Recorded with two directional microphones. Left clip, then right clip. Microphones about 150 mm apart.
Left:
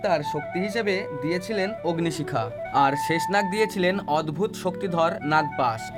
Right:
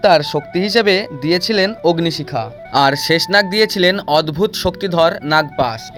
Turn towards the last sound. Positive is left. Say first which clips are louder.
# right 7 dB
turn(degrees=-25)  # may be behind; listen again after turning